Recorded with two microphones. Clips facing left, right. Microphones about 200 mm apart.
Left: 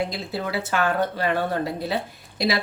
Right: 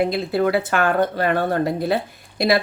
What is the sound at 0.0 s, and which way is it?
A woman's voice, 55° right (ahead or behind).